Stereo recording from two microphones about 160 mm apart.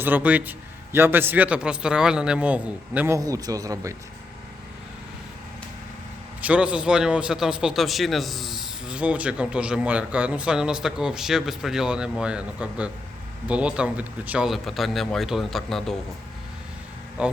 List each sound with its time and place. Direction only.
0.0 s a man's voice: 10° right (ahead or behind)
3.2 s speech: 20° right (ahead or behind)
6.4 s a man's voice: 5° right (ahead or behind)
17.2 s a man's voice: 5° right (ahead or behind)